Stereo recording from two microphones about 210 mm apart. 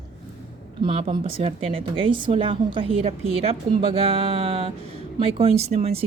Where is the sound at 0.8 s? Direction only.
25° right (ahead or behind).